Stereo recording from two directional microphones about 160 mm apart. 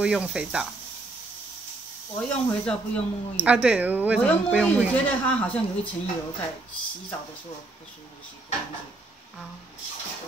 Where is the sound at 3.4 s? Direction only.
5° right (ahead or behind).